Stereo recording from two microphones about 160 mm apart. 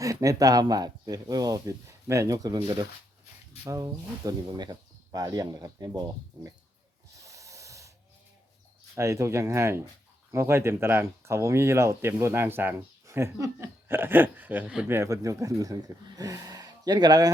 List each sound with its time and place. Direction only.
0.0 s speech: 20° right (ahead or behind)
7.3 s snort: 20° right (ahead or behind)
9.0 s speech: 20° right (ahead or behind)